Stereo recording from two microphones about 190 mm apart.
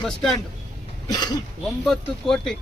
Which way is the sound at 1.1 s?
20° left (ahead or behind).